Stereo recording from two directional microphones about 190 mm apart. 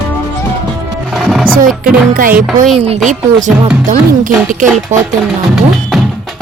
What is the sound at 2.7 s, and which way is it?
Speech, 30° right (ahead or behind).